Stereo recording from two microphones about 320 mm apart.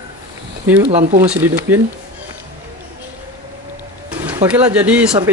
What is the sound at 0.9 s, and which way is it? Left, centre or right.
Speech, right.